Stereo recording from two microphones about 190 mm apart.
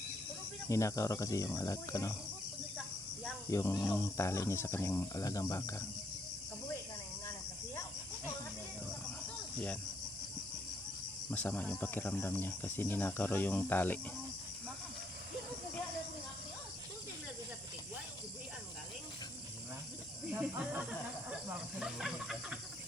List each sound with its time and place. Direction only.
0.7 s speech: 15° left (ahead or behind)
3.5 s speech: 15° left (ahead or behind)
11.3 s speech: 10° left (ahead or behind)
20.3 s speech: 10° right (ahead or behind)